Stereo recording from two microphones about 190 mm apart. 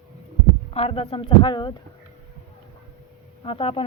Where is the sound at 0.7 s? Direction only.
30° left (ahead or behind).